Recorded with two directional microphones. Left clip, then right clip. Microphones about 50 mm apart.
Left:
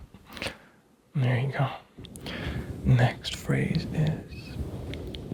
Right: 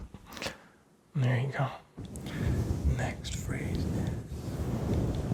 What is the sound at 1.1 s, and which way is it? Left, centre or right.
Speech, right.